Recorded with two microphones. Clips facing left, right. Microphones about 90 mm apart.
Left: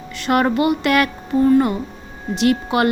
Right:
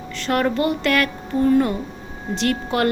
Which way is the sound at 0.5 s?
10° left (ahead or behind).